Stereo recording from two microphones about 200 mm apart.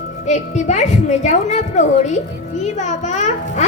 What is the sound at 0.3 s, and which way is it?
A woman's voice, 35° left (ahead or behind).